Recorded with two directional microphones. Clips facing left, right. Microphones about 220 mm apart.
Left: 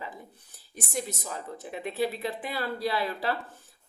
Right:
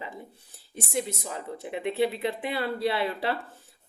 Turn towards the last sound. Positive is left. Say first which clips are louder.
# right 2 dB
turn(degrees=-25)  # may be behind; listen again after turning